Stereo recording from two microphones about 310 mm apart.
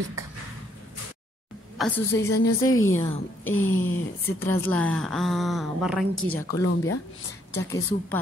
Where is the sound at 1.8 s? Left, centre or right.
Centre.